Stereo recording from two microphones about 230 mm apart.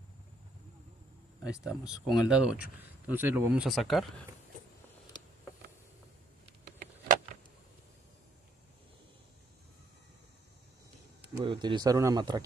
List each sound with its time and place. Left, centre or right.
1.4 s speech: centre
11.4 s speech: centre